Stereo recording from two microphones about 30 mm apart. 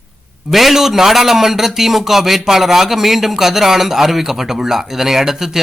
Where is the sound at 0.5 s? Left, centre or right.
Centre.